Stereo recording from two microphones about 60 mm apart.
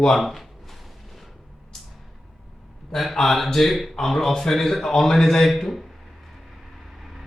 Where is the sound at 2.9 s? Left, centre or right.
Centre.